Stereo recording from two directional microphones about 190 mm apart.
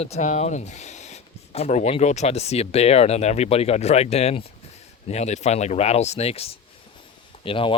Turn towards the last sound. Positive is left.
turn(degrees=25)  # may be behind; listen again after turning